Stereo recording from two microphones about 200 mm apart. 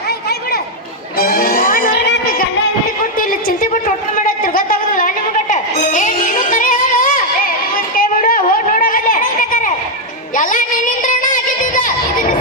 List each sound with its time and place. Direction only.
1.2 s music: 50° left (ahead or behind)
3.0 s a sound: 45° left (ahead or behind)
10.3 s music: 40° left (ahead or behind)